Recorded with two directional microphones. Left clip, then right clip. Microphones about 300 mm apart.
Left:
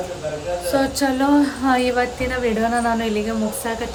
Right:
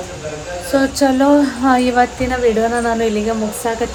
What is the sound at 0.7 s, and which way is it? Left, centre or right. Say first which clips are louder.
Speech: right 6 dB; centre.